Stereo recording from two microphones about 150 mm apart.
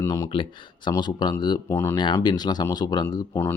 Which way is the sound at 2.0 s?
30° left (ahead or behind).